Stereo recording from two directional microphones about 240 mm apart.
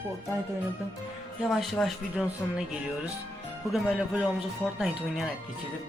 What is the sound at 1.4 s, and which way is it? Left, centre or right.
Speech, centre.